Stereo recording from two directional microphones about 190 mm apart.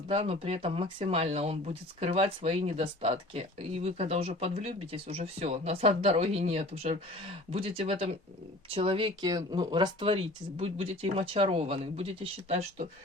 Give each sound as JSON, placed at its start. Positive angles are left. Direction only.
{"t": 0.1, "sound": "speech", "side_deg": -30}